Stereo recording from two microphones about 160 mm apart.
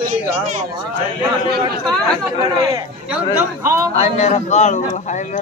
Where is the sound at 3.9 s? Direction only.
45° left (ahead or behind).